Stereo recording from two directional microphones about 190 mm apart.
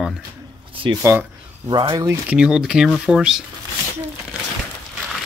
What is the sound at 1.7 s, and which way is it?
Speech, 25° right (ahead or behind).